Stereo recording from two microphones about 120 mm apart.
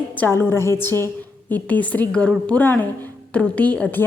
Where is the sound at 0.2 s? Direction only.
20° left (ahead or behind).